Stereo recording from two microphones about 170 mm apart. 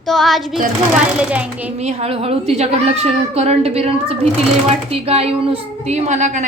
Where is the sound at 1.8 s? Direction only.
40° right (ahead or behind).